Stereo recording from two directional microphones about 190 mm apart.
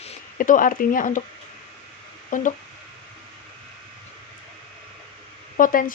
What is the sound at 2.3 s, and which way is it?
Speech, 45° left (ahead or behind).